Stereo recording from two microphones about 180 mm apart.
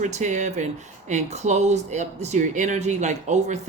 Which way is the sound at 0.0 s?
40° right (ahead or behind).